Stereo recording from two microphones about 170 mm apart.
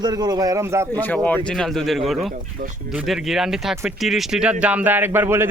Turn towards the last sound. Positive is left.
turn(degrees=-15)  # may be behind; listen again after turning